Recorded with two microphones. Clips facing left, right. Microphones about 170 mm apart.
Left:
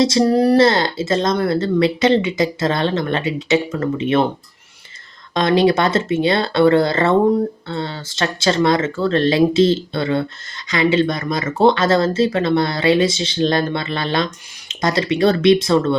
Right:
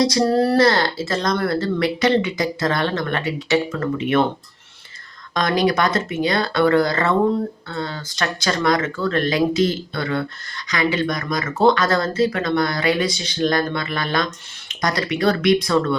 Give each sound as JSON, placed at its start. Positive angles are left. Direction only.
{"t": 0.0, "sound": "speech", "side_deg": 20}
{"t": 5.3, "sound": "speech", "side_deg": 25}